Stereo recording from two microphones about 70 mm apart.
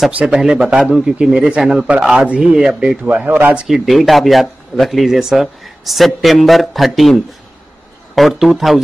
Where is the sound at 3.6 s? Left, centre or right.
Centre.